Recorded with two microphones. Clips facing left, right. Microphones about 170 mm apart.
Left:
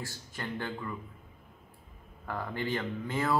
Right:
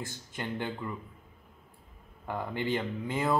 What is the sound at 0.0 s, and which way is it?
Speech, 20° right (ahead or behind).